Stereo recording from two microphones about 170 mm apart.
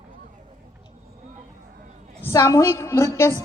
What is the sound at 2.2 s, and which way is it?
A woman's voice, 20° left (ahead or behind).